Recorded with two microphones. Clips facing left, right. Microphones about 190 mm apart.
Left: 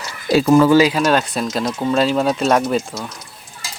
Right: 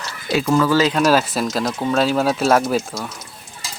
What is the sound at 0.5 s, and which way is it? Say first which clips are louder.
Speech: left 4 dB; 20° left (ahead or behind).